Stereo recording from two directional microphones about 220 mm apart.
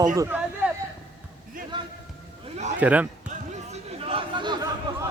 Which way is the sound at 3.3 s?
30° right (ahead or behind).